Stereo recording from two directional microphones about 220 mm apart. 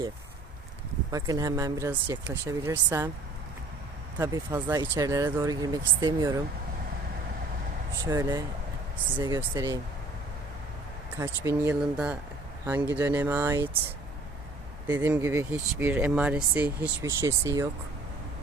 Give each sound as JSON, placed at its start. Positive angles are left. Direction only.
{"t": 1.1, "sound": "speech", "side_deg": -15}
{"t": 4.6, "sound": "speech", "side_deg": -15}
{"t": 8.0, "sound": "speech", "side_deg": -15}
{"t": 11.2, "sound": "speech", "side_deg": -10}
{"t": 14.8, "sound": "speech", "side_deg": -10}